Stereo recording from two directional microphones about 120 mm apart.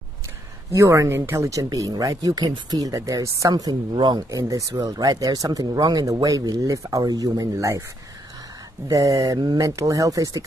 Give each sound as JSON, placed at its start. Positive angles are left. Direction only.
{"t": 0.7, "sound": "speech", "side_deg": -25}
{"t": 8.8, "sound": "speech", "side_deg": -30}